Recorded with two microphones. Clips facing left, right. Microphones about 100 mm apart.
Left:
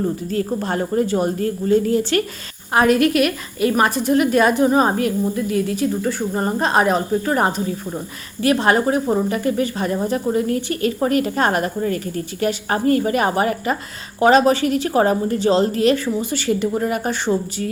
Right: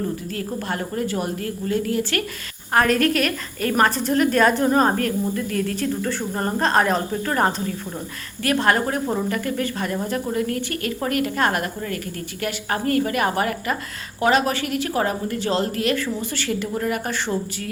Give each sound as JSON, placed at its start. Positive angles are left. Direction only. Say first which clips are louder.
{"t": 0.3, "sound": "speech", "louder": "left 5 dB", "side_deg": 30}
{"t": 2.7, "sound": "a woman's voice", "louder": "left 3 dB", "side_deg": 15}